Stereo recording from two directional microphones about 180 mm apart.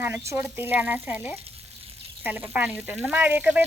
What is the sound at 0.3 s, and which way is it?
Speech, 15° right (ahead or behind).